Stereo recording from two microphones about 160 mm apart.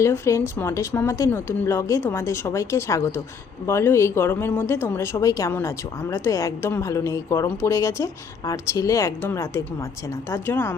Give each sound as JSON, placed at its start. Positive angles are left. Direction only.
{"t": 0.0, "sound": "speech", "side_deg": 15}